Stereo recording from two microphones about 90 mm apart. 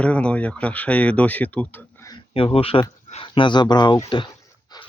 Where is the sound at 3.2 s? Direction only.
70° left (ahead or behind).